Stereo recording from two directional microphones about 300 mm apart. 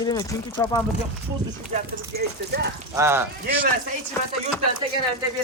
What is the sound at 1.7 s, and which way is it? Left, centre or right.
Speech, right.